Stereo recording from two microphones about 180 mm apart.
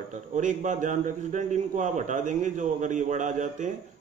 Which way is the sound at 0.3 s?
45° right (ahead or behind).